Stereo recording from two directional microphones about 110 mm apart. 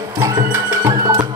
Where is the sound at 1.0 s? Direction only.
30° right (ahead or behind).